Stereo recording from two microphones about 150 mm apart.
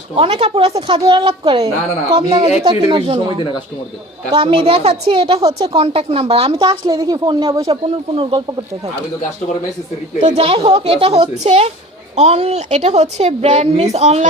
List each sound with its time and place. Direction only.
0.2 s speech: 40° right (ahead or behind)
5.4 s speech: 20° right (ahead or behind)
5.6 s speech: 40° right (ahead or behind)
7.7 s speech: 40° right (ahead or behind)
10.2 s a woman's voice: 45° right (ahead or behind)